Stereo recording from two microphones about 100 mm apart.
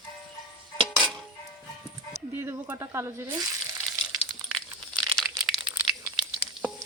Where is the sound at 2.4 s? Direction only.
25° right (ahead or behind).